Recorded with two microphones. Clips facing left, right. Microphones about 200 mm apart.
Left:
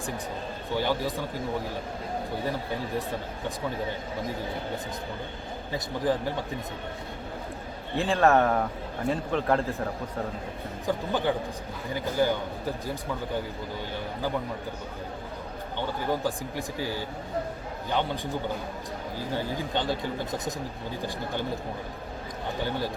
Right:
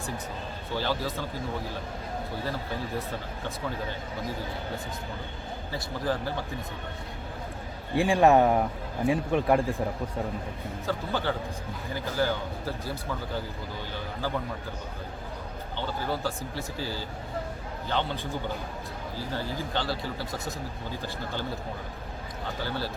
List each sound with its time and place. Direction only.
0.8 s speech: 15° left (ahead or behind)
6.1 s speech: 15° left (ahead or behind)
7.9 s speech: 15° right (ahead or behind)
10.8 s speech: 15° left (ahead or behind)
16.0 s speech: 15° left (ahead or behind)
19.3 s speech: 15° left (ahead or behind)